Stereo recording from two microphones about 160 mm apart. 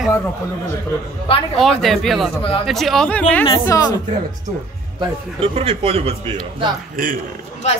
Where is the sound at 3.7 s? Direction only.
25° left (ahead or behind).